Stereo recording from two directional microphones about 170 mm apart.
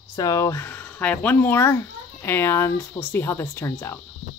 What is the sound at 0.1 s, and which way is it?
Speech, 20° left (ahead or behind).